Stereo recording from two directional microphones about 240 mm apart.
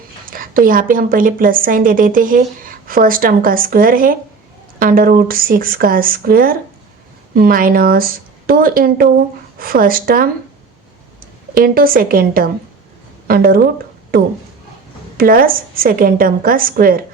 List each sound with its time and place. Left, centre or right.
0.3 s a woman's voice: right
11.5 s a woman's voice: right
15.2 s a woman's voice: right